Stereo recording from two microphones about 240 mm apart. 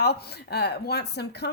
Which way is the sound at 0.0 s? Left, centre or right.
Left.